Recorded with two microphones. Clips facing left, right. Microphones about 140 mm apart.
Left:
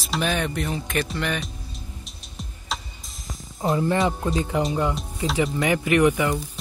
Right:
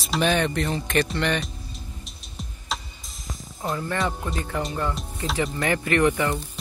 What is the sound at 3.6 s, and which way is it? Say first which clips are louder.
Speech: left 5 dB; 20° left (ahead or behind).